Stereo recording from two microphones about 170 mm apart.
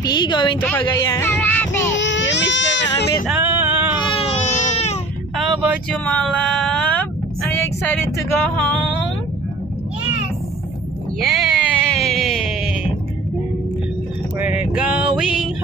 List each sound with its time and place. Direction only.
0.0 s speech: 25° left (ahead or behind)
0.6 s speech: 10° left (ahead or behind)
0.8 s speech: 25° left (ahead or behind)
1.4 s child singing: 10° left (ahead or behind)
2.0 s baby cry: 90° left
3.4 s male singing: 15° right (ahead or behind)
3.9 s baby cry: 30° left (ahead or behind)
5.4 s speech: centre (ahead or behind)
7.5 s female singing: 10° left (ahead or behind)
11.1 s music: centre (ahead or behind)
14.4 s a sound: 5° right (ahead or behind)